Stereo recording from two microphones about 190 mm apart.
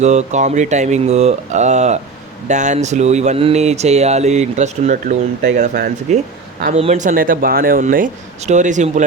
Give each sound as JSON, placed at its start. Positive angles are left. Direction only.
{"t": 0.0, "sound": "speech", "side_deg": -35}